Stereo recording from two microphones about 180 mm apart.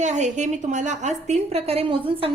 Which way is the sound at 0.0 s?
40° right (ahead or behind).